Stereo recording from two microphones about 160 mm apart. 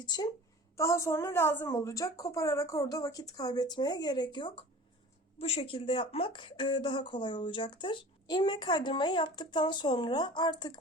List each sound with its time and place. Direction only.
0.0 s a woman's voice: 25° left (ahead or behind)